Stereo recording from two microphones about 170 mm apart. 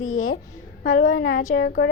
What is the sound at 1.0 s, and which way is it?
Speech, 90° left.